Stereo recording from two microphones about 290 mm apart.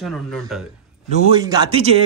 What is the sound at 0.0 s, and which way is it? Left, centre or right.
Speech, centre.